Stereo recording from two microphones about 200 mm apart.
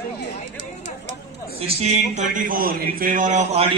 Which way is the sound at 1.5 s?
30° right (ahead or behind).